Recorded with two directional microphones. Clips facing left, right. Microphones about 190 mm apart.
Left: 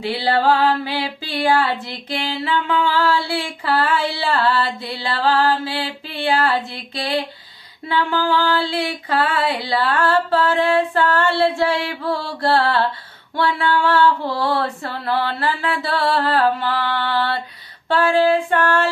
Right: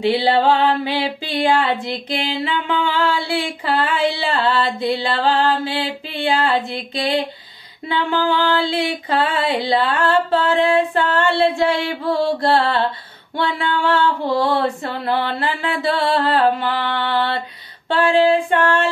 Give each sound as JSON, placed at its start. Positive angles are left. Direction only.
{"t": 0.0, "sound": "female singing", "side_deg": -20}